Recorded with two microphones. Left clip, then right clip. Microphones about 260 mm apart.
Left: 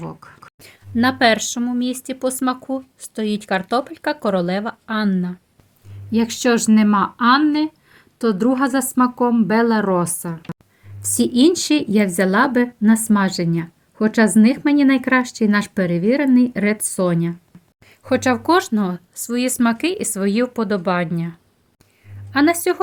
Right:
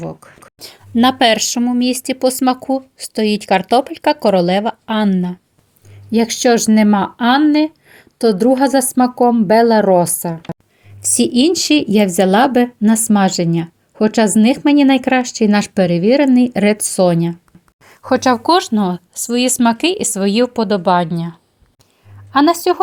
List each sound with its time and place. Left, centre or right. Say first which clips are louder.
0.6 s speech: right 5 dB; right
6.1 s a woman's voice: right 5 dB; centre